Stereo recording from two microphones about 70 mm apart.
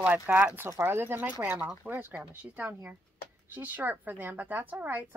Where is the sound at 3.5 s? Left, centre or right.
Right.